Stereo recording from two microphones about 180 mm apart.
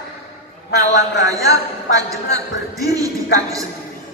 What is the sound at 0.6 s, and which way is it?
Speech, 70° left (ahead or behind).